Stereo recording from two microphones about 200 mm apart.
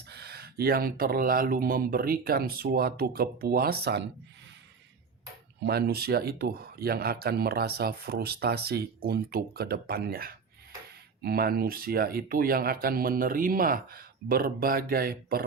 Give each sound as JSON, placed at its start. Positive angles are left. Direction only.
{"t": 0.1, "sound": "speech", "side_deg": -55}
{"t": 5.6, "sound": "speech", "side_deg": -55}